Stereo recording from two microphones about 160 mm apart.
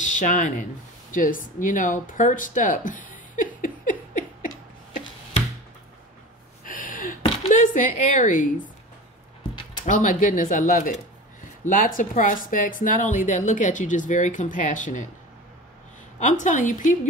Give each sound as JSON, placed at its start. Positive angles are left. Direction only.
{"t": 0.0, "sound": "speech", "side_deg": 50}
{"t": 6.6, "sound": "a sound", "side_deg": 55}
{"t": 7.4, "sound": "speech", "side_deg": 50}
{"t": 9.8, "sound": "speech", "side_deg": 50}
{"t": 16.2, "sound": "speech", "side_deg": 50}